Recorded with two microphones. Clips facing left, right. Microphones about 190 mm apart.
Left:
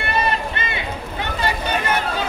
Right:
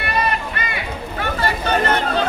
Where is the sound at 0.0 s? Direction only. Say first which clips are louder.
Even; 25° left (ahead or behind).